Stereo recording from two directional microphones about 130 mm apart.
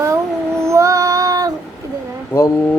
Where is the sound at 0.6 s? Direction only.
20° right (ahead or behind).